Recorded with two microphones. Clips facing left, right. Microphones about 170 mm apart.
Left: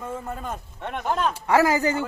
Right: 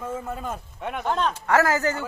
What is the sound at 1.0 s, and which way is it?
Speech, 5° left (ahead or behind).